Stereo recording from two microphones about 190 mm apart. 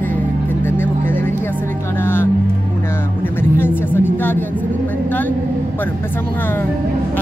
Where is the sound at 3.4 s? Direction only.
10° left (ahead or behind).